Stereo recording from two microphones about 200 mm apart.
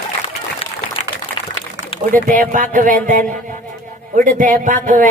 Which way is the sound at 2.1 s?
40° right (ahead or behind).